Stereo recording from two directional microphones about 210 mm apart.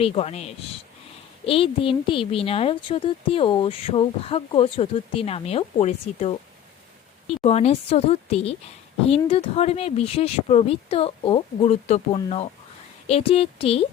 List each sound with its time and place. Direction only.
0.0 s speech: 30° left (ahead or behind)